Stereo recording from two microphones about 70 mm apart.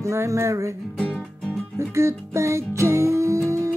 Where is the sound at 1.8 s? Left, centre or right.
Right.